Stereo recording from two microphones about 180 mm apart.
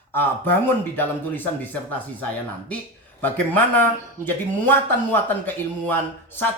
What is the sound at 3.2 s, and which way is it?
Speech, 10° left (ahead or behind).